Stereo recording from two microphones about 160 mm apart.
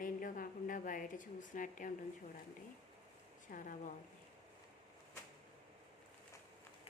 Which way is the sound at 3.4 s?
55° left (ahead or behind).